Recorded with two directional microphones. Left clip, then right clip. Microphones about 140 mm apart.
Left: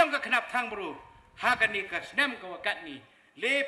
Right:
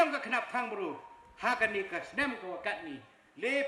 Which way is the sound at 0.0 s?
35° left (ahead or behind).